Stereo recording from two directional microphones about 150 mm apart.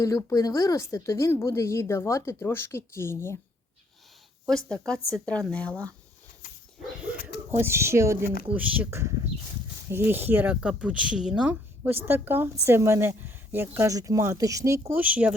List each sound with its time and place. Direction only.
0.0 s speech: 20° left (ahead or behind)
4.4 s a woman's voice: 5° left (ahead or behind)
6.4 s dog: 60° left (ahead or behind)
7.6 s speech: 15° right (ahead or behind)